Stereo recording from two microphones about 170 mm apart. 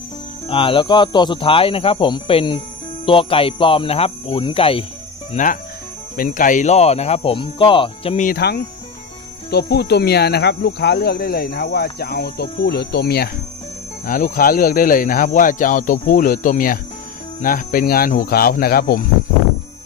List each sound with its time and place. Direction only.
0.5 s speech: 30° left (ahead or behind)
5.3 s speech: 50° left (ahead or behind); by 8.2 s 30° left (ahead or behind)
8.2 s speech: 65° left (ahead or behind)
14.0 s speech: 55° left (ahead or behind)